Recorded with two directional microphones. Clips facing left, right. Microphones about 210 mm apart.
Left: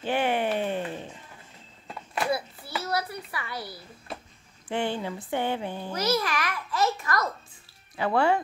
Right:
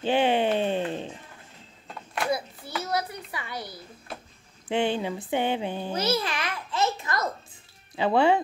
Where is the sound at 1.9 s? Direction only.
5° left (ahead or behind).